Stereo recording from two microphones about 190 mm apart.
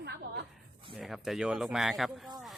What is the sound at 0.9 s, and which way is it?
Speech, centre (ahead or behind).